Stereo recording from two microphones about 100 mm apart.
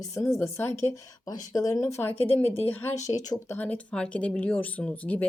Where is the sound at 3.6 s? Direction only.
15° left (ahead or behind).